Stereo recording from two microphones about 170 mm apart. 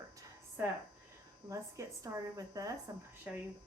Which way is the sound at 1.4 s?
20° right (ahead or behind).